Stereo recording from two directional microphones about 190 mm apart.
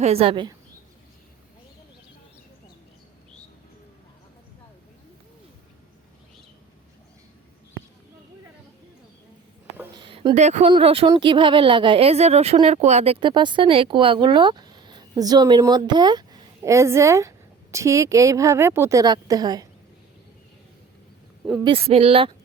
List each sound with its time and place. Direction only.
0.0 s speech: 30° right (ahead or behind)
9.9 s a sound: 25° right (ahead or behind)
10.7 s a woman's voice: 30° right (ahead or behind)
21.6 s speech: 30° right (ahead or behind)